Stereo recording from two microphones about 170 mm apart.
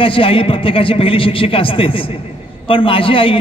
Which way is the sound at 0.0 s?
30° left (ahead or behind).